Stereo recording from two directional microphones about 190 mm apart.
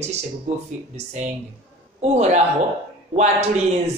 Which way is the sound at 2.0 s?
35° right (ahead or behind).